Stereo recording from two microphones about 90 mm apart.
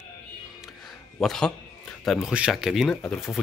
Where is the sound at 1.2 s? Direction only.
5° left (ahead or behind).